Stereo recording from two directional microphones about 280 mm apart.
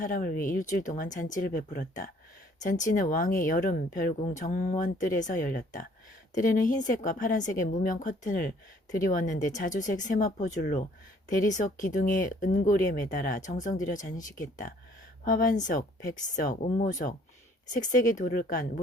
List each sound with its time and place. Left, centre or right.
0.0 s a woman's voice: left